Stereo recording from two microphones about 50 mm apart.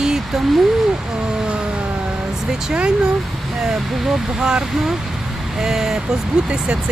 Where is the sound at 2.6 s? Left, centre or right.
Centre.